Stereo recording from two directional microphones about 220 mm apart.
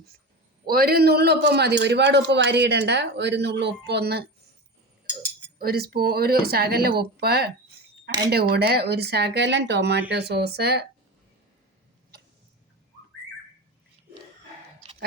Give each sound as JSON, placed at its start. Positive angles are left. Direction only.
{"t": 0.6, "sound": "a man's voice", "side_deg": -45}
{"t": 5.5, "sound": "a man's voice", "side_deg": -45}